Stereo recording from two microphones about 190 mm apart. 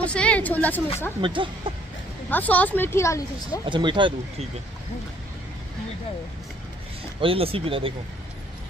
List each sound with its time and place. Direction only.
0.0 s speech: 5° left (ahead or behind)
1.2 s speech: 25° right (ahead or behind)
2.3 s speech: 10° left (ahead or behind)
3.6 s speech: 25° right (ahead or behind)
7.2 s speech: 30° right (ahead or behind)